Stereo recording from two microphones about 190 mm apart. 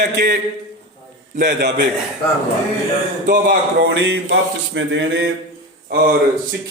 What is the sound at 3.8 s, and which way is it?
Speech, 70° right (ahead or behind).